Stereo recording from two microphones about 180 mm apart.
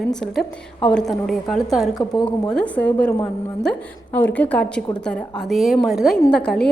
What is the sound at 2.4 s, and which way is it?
Speech, 5° left (ahead or behind).